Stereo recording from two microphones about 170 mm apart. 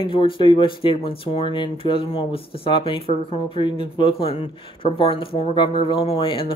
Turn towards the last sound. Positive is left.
turn(degrees=30)  # may be behind; listen again after turning